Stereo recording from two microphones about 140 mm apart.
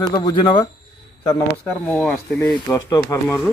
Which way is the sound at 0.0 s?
35° left (ahead or behind).